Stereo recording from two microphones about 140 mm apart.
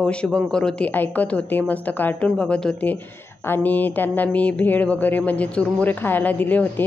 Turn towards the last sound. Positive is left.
turn(degrees=10)  # may be behind; listen again after turning